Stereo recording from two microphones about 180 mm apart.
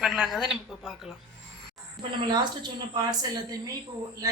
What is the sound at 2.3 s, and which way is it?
Speech, 25° right (ahead or behind).